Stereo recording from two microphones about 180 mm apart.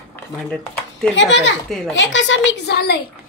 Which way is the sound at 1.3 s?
90° left.